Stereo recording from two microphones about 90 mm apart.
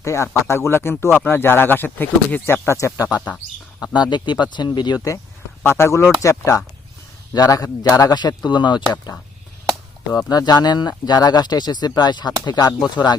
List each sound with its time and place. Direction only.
0.0 s speech: 35° left (ahead or behind)
3.9 s speech: 55° left (ahead or behind)
5.6 s speech: 30° left (ahead or behind); by 8.8 s 55° left (ahead or behind)
10.1 s speech: 45° left (ahead or behind)